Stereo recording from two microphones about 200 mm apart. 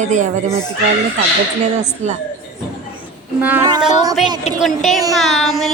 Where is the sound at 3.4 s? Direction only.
10° right (ahead or behind).